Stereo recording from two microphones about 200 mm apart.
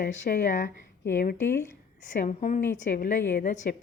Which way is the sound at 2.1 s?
40° left (ahead or behind).